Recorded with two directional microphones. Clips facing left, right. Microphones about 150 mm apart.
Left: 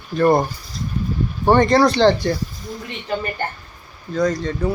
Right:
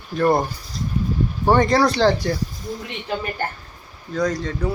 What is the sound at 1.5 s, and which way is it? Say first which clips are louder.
Speech: left 3 dB; 5° right (ahead or behind).